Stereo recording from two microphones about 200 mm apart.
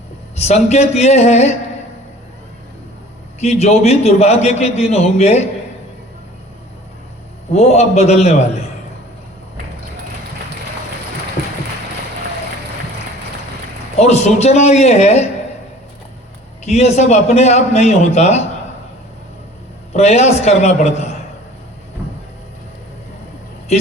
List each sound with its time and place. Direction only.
0.4 s a man's voice: 35° left (ahead or behind)
3.4 s a man's voice: 30° left (ahead or behind)
7.5 s a man's voice: 30° left (ahead or behind)
14.0 s a man's voice: 35° left (ahead or behind)
16.6 s a man's voice: 30° left (ahead or behind)
19.9 s a man's voice: 35° left (ahead or behind)